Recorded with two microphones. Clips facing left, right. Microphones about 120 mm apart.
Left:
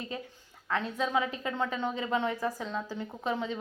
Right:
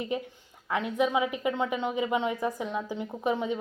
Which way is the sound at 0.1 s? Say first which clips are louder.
Right 7 dB; 20° right (ahead or behind).